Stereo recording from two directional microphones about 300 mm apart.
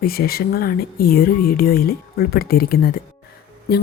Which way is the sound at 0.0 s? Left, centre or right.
Left.